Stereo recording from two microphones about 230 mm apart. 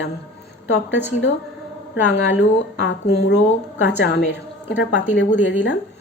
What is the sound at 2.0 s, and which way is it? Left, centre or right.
A woman's voice, left.